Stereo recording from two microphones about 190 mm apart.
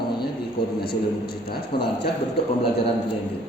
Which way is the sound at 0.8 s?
55° left (ahead or behind).